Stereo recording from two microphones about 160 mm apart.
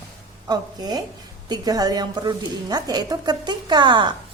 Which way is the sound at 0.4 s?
25° right (ahead or behind).